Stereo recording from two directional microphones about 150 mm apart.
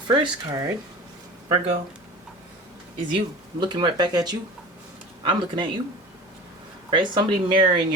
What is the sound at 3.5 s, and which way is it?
Speech, 30° right (ahead or behind).